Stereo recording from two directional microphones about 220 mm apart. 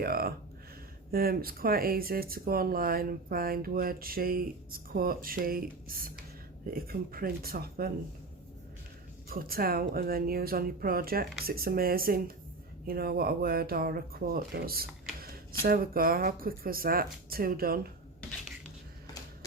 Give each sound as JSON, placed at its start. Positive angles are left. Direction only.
{"t": 0.0, "sound": "speech", "side_deg": -45}
{"t": 9.3, "sound": "speech", "side_deg": -40}